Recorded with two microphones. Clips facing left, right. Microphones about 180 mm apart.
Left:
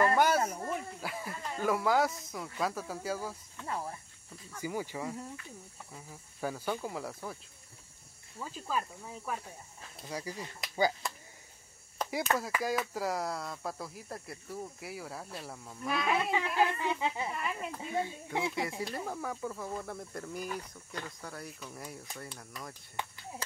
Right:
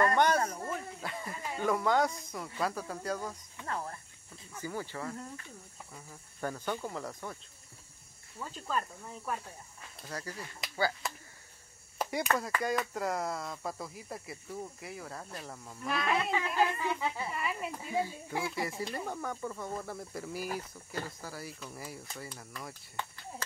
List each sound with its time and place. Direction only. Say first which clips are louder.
0.0 s snake: even; 5° left (ahead or behind)
1.6 s speech: even; 5° left (ahead or behind)
4.6 s cricket: left 2 dB; 10° left (ahead or behind)
8.4 s speech: even; 5° left (ahead or behind)
10.0 s cricket: left 2 dB; 10° left (ahead or behind)
11.0 s a sound: even; centre (ahead or behind)
12.0 s chop: right 1 dB; 10° right (ahead or behind)
12.4 s speech: even; centre (ahead or behind)
16.8 s speech: left 1 dB; 20° left (ahead or behind)
17.3 s speech: right 1 dB; centre (ahead or behind)